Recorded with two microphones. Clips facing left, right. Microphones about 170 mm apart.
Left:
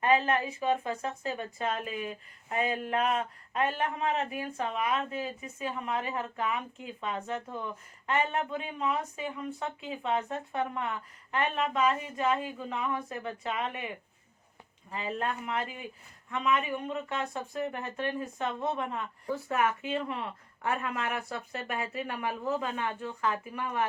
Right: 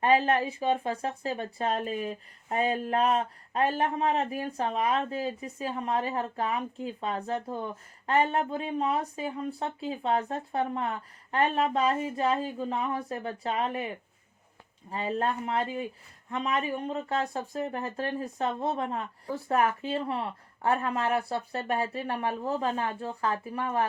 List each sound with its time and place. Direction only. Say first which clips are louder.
0.0 s speech: right 3 dB; 35° right (ahead or behind)